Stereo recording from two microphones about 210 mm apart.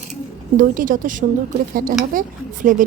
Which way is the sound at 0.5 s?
40° right (ahead or behind).